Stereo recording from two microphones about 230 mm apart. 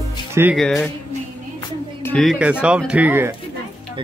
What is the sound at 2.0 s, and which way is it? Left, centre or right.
Speech, centre.